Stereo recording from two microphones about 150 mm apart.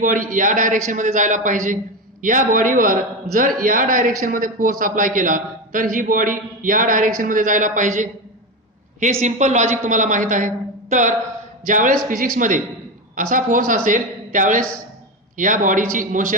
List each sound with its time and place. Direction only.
0.0 s a man's voice: 60° right (ahead or behind)
9.2 s a man's voice: 50° right (ahead or behind)